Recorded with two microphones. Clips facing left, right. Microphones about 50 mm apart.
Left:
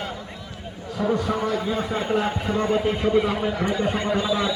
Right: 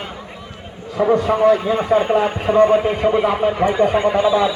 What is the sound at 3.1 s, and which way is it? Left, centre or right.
Speech, right.